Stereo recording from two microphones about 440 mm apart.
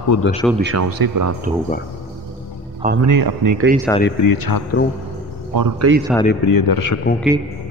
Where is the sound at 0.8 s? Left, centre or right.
Right.